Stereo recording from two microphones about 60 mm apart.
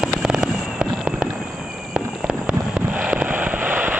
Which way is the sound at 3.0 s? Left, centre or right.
Centre.